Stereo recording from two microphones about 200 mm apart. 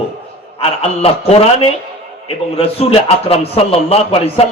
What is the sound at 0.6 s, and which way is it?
A man's voice, 30° left (ahead or behind).